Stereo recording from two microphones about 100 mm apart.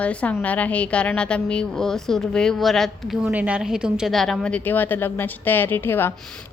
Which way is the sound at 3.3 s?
15° right (ahead or behind).